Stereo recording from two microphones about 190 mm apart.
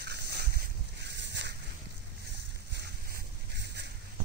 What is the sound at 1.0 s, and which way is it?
Boat, 65° right (ahead or behind).